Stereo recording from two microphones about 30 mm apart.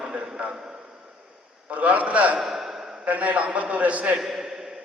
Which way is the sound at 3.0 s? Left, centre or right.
Right.